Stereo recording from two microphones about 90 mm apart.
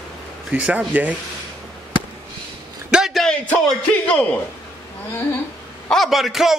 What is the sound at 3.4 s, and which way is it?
Speech, 15° left (ahead or behind).